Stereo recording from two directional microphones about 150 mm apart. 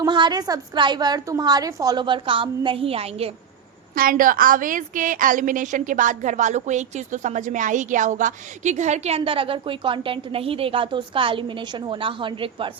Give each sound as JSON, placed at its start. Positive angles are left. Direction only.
{"t": 0.0, "sound": "a woman's voice", "side_deg": -30}
{"t": 3.9, "sound": "a woman's voice", "side_deg": -70}